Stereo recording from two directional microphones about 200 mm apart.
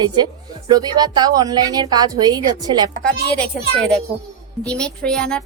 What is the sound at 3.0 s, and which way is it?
A woman's voice, 5° left (ahead or behind).